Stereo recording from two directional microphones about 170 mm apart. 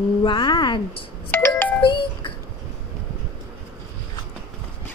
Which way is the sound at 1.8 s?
30° left (ahead or behind).